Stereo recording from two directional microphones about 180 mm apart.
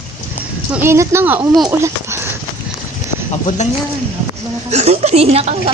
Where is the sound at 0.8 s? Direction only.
15° right (ahead or behind).